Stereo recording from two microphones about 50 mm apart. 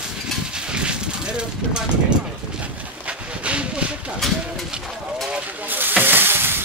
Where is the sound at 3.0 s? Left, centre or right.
Right.